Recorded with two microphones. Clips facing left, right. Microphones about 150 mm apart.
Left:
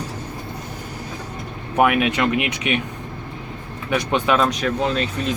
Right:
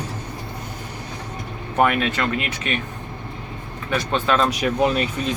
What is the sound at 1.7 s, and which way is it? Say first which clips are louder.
Speech: left 2 dB; 10° left (ahead or behind).